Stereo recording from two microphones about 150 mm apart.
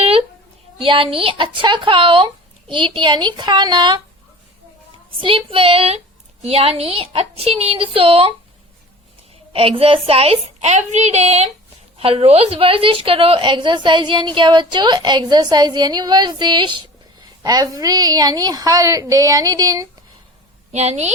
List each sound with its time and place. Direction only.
0.0 s a sound: 40° right (ahead or behind)
0.8 s speech: 35° right (ahead or behind)
5.1 s speech: 35° right (ahead or behind)
9.5 s a woman's voice: 40° right (ahead or behind)
20.7 s speech: 45° right (ahead or behind)